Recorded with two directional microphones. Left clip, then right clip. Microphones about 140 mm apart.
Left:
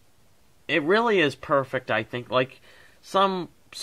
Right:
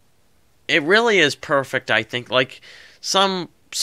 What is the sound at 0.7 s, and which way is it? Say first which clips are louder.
Speech: right 6 dB; 20° right (ahead or behind).